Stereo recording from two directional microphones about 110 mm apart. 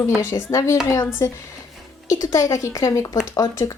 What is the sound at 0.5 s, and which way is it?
Speech, 30° left (ahead or behind).